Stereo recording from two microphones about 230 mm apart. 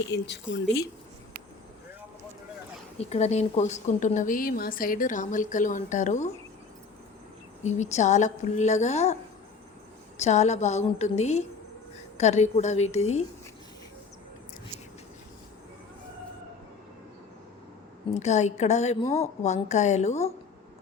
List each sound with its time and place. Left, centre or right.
0.1 s speech: left
3.0 s a woman's voice: left
7.6 s a woman's voice: left
10.2 s a woman's voice: left
18.1 s a woman's voice: left